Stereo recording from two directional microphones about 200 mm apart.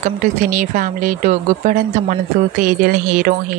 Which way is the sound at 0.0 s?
40° right (ahead or behind).